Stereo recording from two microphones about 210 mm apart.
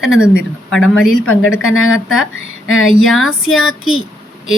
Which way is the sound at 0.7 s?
Centre (ahead or behind).